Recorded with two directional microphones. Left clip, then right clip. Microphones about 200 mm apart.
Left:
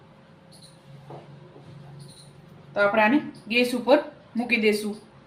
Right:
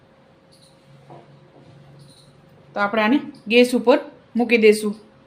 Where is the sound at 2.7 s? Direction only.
60° right (ahead or behind).